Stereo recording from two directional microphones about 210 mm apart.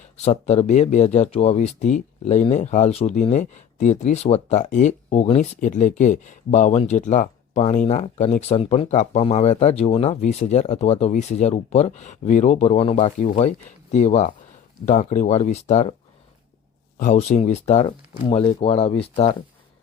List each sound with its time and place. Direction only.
0.2 s speech: 30° left (ahead or behind)
17.0 s speech: 35° left (ahead or behind)